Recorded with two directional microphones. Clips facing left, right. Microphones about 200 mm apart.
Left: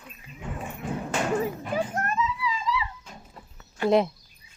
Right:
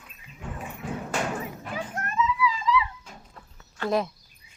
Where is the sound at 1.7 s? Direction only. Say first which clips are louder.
Left 1 dB; 40° left (ahead or behind).